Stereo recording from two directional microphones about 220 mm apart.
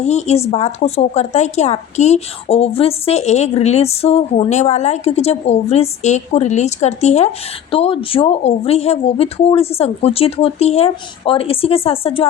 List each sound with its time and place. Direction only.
0.0 s speech: 30° left (ahead or behind)